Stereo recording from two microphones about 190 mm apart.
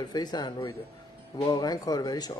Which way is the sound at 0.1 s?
20° left (ahead or behind).